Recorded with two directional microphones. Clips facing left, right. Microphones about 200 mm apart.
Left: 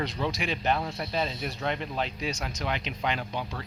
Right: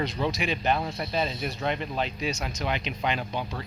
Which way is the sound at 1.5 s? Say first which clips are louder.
Right 2 dB; 15° right (ahead or behind).